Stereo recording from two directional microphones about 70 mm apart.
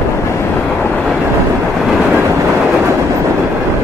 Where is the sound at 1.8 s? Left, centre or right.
Centre.